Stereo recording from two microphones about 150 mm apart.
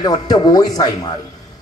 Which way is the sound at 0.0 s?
25° left (ahead or behind).